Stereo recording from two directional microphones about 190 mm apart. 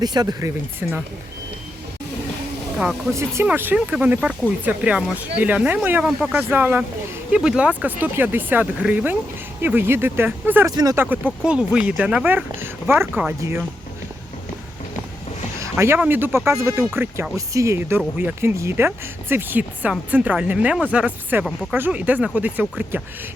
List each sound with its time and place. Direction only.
0.0 s speech: 20° right (ahead or behind)
2.7 s speech: 5° right (ahead or behind)
15.6 s speech: 15° right (ahead or behind)